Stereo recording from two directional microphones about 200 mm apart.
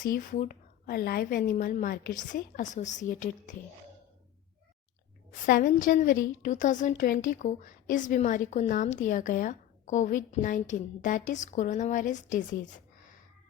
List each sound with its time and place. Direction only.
0.0 s a woman's voice: 40° left (ahead or behind)
5.3 s a woman's voice: 40° left (ahead or behind)